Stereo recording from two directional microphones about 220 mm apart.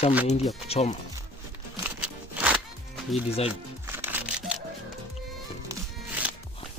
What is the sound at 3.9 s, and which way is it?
Music, 10° right (ahead or behind).